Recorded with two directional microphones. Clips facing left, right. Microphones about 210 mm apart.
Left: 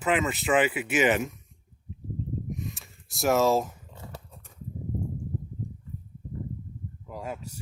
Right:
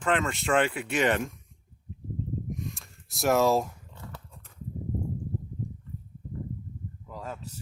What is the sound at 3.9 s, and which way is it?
Dog, 20° left (ahead or behind).